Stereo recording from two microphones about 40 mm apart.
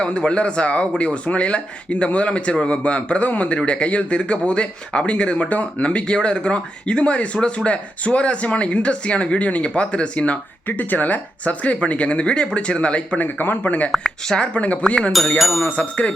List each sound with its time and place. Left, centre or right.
0.0 s speech: left
10.7 s speech: left
13.1 s speech: left
14.3 s speech: left
14.6 s speech: left
15.4 s speech: centre
15.7 s speech: left